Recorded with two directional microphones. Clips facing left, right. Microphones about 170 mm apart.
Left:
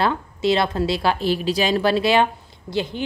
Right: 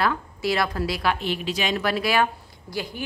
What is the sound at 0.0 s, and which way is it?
A woman's voice, 25° left (ahead or behind).